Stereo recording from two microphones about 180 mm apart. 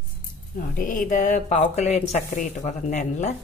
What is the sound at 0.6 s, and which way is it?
Speech, 50° left (ahead or behind).